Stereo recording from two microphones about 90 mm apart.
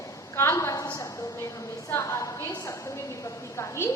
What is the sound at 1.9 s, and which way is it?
Speech, 35° left (ahead or behind).